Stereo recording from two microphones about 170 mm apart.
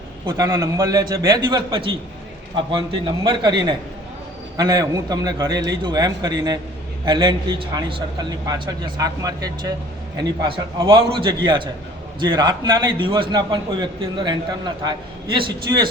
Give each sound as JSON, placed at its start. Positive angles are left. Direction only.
{"t": 0.3, "sound": "a man's voice", "side_deg": -20}
{"t": 3.2, "sound": "a man's voice", "side_deg": -25}